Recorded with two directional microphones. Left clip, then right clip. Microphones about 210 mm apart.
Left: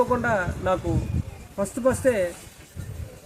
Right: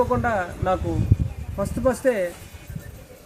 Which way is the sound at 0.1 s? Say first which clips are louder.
Even; centre (ahead or behind).